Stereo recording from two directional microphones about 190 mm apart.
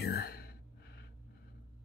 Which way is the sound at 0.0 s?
55° left (ahead or behind).